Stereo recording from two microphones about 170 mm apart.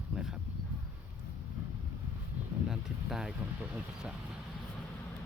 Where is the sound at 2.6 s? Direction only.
5° right (ahead or behind).